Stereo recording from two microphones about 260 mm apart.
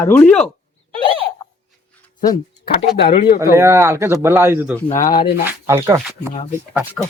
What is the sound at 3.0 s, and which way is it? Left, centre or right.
Speech, left.